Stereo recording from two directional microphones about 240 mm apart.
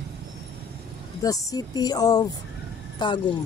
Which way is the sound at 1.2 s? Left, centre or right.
Centre.